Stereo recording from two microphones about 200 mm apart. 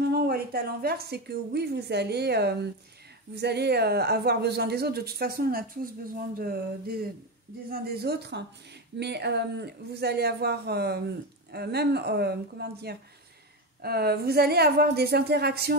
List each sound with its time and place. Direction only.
0.0 s speech: 50° right (ahead or behind)